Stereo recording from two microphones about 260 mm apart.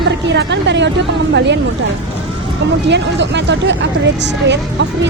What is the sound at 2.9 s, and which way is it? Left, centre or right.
A woman's voice, right.